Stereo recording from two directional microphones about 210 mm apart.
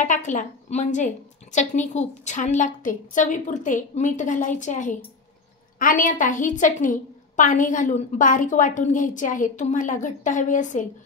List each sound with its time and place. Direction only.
0.0 s a woman's voice: 35° left (ahead or behind)